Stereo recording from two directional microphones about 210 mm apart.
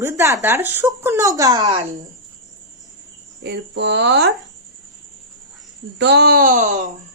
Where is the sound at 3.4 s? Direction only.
55° right (ahead or behind).